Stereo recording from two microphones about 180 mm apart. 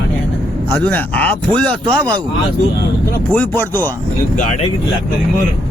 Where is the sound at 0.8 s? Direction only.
10° left (ahead or behind).